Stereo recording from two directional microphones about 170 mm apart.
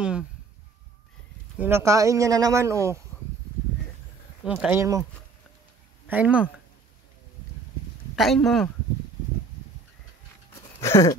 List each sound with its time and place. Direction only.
0.0 s speech: 5° right (ahead or behind)
1.6 s speech: 15° right (ahead or behind)
4.5 s speech: 10° right (ahead or behind)
6.0 s speech: 10° right (ahead or behind)
8.2 s speech: centre (ahead or behind)
10.8 s a sound: 15° left (ahead or behind)